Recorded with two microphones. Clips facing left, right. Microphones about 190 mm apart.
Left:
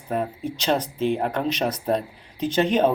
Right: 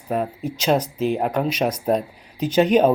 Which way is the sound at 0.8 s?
30° left (ahead or behind).